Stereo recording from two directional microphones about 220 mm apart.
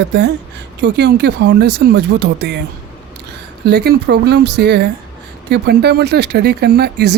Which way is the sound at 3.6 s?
45° right (ahead or behind).